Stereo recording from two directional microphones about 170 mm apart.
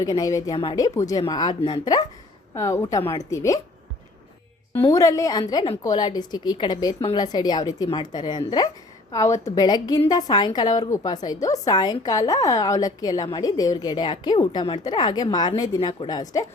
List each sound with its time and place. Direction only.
0.0 s a woman's voice: 20° left (ahead or behind)
0.9 s a woman's voice: 20° left (ahead or behind)
4.7 s a woman's voice: 20° left (ahead or behind)